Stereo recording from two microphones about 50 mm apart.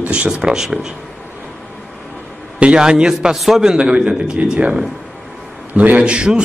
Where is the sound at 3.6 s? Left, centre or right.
Centre.